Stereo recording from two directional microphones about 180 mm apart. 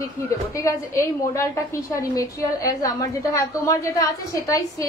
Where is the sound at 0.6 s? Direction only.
15° left (ahead or behind).